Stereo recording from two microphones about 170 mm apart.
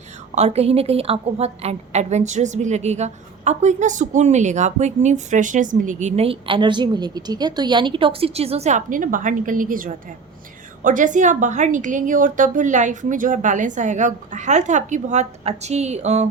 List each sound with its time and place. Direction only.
0.3 s a woman's voice: 40° right (ahead or behind)